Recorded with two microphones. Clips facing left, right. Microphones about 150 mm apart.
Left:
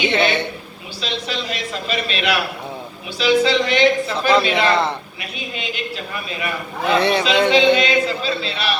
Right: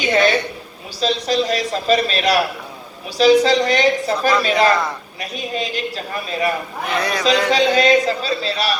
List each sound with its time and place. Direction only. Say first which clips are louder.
0.0 s a sound: right 2 dB; 40° right (ahead or behind)
1.0 s speech: right 8 dB; 40° right (ahead or behind)
6.8 s speech: left 6 dB; 25° left (ahead or behind)
7.5 s speech: right 2 dB; 40° right (ahead or behind)